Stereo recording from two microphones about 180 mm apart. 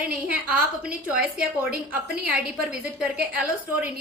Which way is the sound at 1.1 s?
55° right (ahead or behind).